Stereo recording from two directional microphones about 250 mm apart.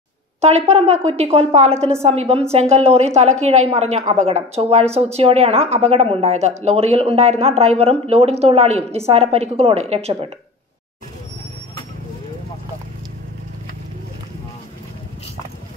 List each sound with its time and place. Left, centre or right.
0.4 s speech: right